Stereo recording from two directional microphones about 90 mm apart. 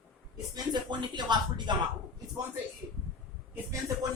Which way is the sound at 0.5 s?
55° right (ahead or behind).